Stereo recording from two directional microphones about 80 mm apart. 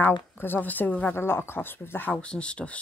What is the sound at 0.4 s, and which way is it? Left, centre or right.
Speech, left.